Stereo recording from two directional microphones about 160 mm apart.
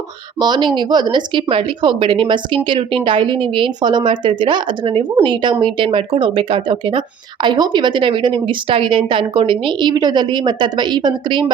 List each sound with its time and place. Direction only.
0.3 s speech: 25° right (ahead or behind)